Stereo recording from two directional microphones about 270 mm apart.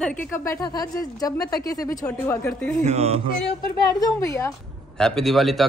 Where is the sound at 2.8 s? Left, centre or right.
Right.